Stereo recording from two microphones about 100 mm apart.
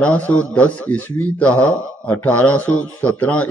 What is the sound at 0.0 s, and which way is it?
A man's voice, 15° left (ahead or behind).